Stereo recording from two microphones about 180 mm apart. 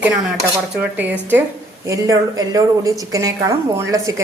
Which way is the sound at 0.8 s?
10° right (ahead or behind).